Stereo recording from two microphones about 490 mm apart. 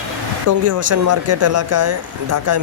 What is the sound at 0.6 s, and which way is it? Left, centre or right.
Speech, right.